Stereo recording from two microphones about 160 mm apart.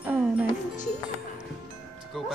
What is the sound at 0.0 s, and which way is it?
Music, 10° right (ahead or behind).